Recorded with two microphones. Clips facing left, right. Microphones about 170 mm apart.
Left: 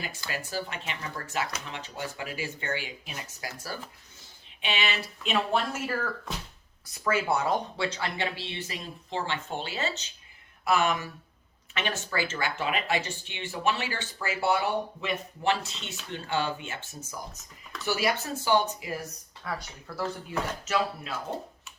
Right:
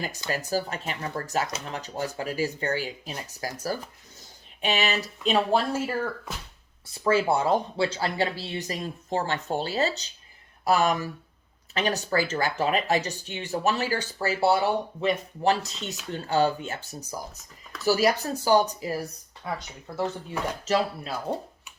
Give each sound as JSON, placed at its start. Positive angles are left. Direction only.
{"t": 0.3, "sound": "speech", "side_deg": -40}
{"t": 19.5, "sound": "speech", "side_deg": -20}
{"t": 20.7, "sound": "speech", "side_deg": -35}